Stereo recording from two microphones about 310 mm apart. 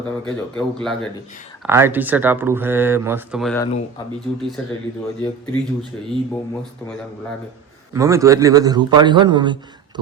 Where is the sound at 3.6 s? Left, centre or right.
Centre.